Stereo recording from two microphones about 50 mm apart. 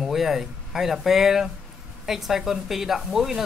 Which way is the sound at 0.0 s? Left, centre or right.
Centre.